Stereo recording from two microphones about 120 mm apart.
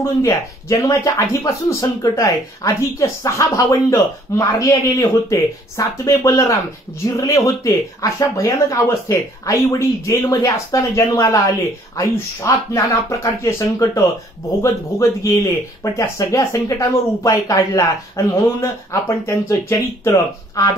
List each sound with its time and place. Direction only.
0.0 s speech: 25° left (ahead or behind)